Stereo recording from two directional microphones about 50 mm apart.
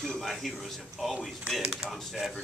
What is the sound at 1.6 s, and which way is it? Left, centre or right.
Speech, centre.